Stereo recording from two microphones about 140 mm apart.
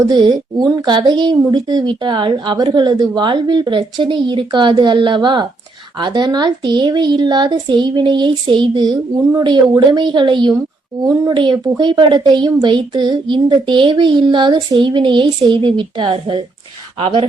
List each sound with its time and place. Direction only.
0.1 s a woman's voice: 30° right (ahead or behind)